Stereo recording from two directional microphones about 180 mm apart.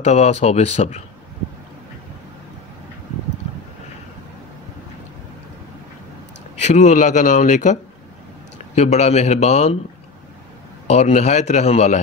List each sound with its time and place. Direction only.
0.0 s speech: 40° left (ahead or behind)
6.6 s a man's voice: 40° left (ahead or behind)
10.9 s speech: 40° left (ahead or behind)